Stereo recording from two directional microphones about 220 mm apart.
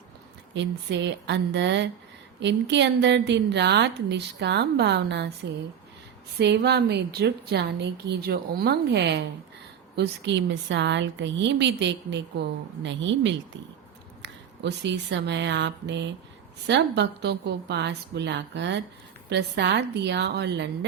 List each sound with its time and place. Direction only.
0.5 s a woman's voice: 55° right (ahead or behind)
6.4 s a woman's voice: 50° right (ahead or behind)